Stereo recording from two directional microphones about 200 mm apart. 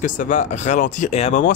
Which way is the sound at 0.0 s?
40° left (ahead or behind).